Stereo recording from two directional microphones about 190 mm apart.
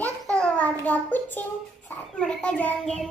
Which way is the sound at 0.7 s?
10° left (ahead or behind).